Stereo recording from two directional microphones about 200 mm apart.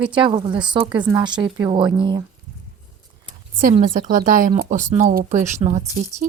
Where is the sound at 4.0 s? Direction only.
40° right (ahead or behind).